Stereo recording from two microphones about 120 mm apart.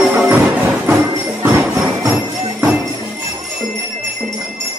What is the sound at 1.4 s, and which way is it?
Jingle bell, 20° right (ahead or behind).